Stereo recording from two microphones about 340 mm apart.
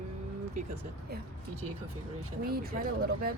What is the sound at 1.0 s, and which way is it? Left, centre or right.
Speech, right.